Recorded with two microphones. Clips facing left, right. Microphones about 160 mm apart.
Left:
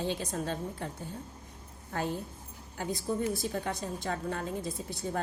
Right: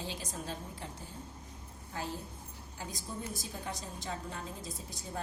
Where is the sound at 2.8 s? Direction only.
60° left (ahead or behind).